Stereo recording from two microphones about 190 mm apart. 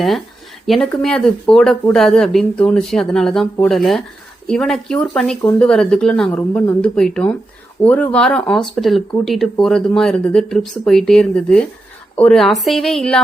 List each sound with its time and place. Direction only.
0.7 s speech: 5° left (ahead or behind)
5.4 s speech: 15° left (ahead or behind)
5.6 s speech: 5° left (ahead or behind)